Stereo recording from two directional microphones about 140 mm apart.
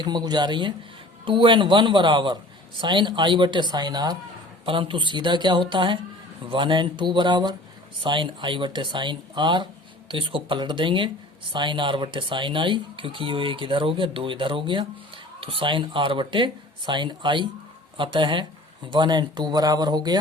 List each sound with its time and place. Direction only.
0.0 s speech: 30° right (ahead or behind)